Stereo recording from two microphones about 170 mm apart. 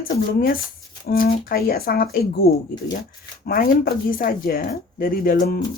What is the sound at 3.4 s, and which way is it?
Speech, 60° left (ahead or behind).